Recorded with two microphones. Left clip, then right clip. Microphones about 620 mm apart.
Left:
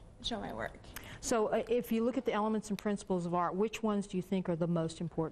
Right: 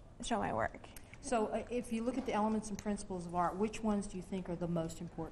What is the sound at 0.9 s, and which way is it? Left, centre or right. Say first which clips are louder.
A woman's voice: left 5 dB; left.